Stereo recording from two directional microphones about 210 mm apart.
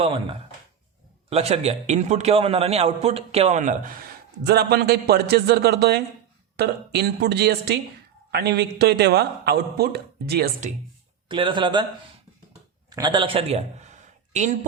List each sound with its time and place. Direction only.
0.0 s a man's voice: 25° right (ahead or behind)
4.4 s speech: 50° right (ahead or behind)
11.3 s a man's voice: 25° right (ahead or behind)
12.9 s a man's voice: 20° right (ahead or behind)